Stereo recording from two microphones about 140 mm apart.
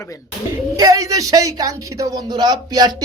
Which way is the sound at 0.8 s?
25° right (ahead or behind).